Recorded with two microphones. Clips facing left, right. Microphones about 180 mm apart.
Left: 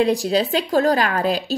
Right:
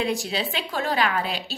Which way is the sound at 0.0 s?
35° left (ahead or behind).